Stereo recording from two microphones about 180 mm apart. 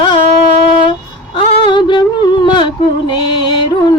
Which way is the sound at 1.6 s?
25° left (ahead or behind).